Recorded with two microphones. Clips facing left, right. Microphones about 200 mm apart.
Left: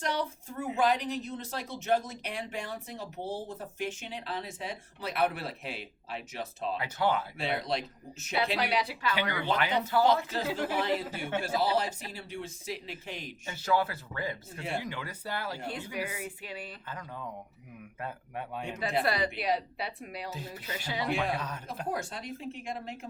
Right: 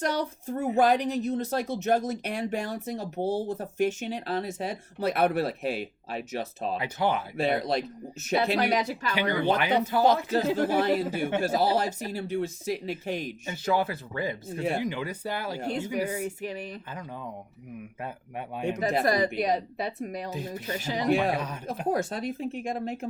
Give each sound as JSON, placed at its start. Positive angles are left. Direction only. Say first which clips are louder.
{"t": 0.0, "sound": "speech", "louder": "right 4 dB", "side_deg": -45}
{"t": 6.7, "sound": "speech", "louder": "right 2 dB", "side_deg": -15}
{"t": 7.3, "sound": "speech", "louder": "right 6 dB", "side_deg": -45}
{"t": 9.6, "sound": "speech", "louder": "right 3 dB", "side_deg": -20}
{"t": 10.3, "sound": "speech", "louder": "right 7 dB", "side_deg": -45}
{"t": 13.4, "sound": "speech", "louder": "right 1 dB", "side_deg": -20}
{"t": 16.0, "sound": "speech", "louder": "right 7 dB", "side_deg": -45}
{"t": 16.9, "sound": "speech", "louder": "right 3 dB", "side_deg": -15}
{"t": 18.8, "sound": "speech", "louder": "right 4 dB", "side_deg": -45}
{"t": 21.3, "sound": "speech", "louder": "right 4 dB", "side_deg": -15}
{"t": 21.9, "sound": "speech", "louder": "right 8 dB", "side_deg": -45}